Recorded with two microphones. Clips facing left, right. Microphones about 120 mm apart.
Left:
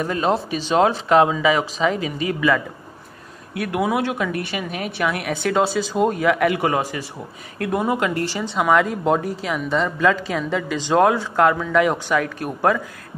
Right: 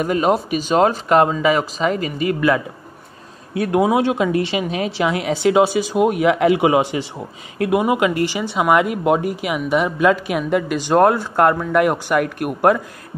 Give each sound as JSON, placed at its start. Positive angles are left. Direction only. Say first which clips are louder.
{"t": 0.0, "sound": "a woman's voice", "louder": "right 3 dB", "side_deg": -10}
{"t": 3.7, "sound": "a woman's voice", "louder": "right 5 dB", "side_deg": -20}
{"t": 7.5, "sound": "a woman's voice", "louder": "right 4 dB", "side_deg": -10}